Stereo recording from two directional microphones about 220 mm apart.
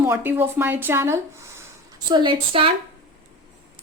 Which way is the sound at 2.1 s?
20° right (ahead or behind).